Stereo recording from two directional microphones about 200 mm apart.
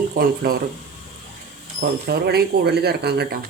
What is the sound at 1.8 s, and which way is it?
Speech, 55° right (ahead or behind).